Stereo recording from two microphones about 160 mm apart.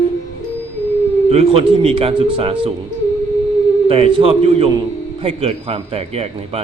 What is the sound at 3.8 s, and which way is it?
Speech, 35° right (ahead or behind).